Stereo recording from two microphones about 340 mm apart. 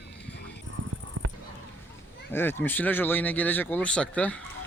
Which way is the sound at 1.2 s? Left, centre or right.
Right.